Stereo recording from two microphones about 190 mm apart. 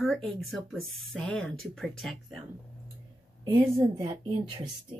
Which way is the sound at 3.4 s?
20° right (ahead or behind).